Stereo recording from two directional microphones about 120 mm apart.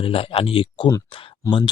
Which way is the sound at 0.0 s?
50° left (ahead or behind).